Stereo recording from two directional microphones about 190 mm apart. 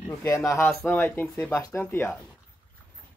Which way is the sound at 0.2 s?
15° left (ahead or behind).